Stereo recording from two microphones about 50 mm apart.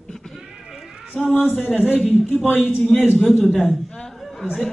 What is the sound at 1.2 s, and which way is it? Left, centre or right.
Speech, left.